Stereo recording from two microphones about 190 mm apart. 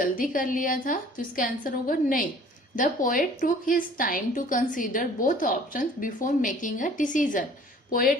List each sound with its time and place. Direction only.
0.0 s a woman's voice: 45° left (ahead or behind)